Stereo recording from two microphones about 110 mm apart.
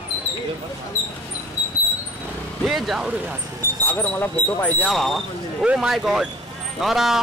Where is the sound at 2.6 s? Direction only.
Centre (ahead or behind).